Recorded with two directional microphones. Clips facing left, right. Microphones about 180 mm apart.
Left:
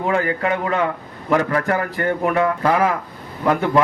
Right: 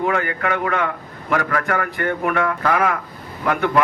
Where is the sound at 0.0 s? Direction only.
30° left (ahead or behind).